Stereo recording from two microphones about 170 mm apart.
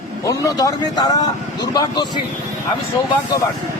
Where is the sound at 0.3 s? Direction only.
20° left (ahead or behind).